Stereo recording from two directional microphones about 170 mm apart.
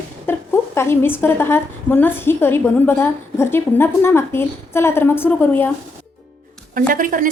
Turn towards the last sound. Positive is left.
turn(degrees=-50)  # may be behind; listen again after turning